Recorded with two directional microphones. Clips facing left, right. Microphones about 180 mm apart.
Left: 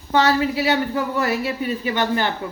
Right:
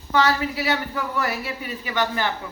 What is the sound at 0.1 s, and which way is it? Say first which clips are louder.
A woman's voice: left 3 dB; 30° left (ahead or behind).